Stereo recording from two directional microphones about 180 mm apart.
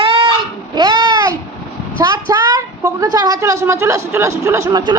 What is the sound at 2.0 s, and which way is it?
A woman's voice, 20° right (ahead or behind).